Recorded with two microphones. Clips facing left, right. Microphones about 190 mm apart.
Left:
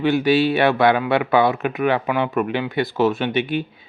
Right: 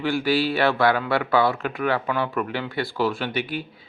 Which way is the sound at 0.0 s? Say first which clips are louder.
Left 5 dB; 20° left (ahead or behind).